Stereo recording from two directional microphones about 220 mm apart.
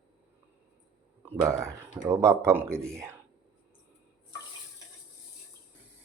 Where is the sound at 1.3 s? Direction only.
10° right (ahead or behind).